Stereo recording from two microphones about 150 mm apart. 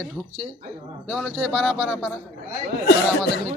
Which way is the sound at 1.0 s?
5° right (ahead or behind).